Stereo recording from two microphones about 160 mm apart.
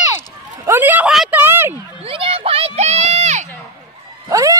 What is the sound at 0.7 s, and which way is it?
Speech, 10° right (ahead or behind).